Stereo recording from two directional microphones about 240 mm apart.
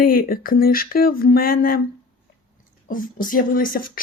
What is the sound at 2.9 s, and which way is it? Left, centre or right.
Speech, left.